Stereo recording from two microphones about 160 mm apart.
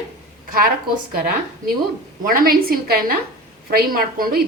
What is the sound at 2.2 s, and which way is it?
A woman's voice, 65° right (ahead or behind).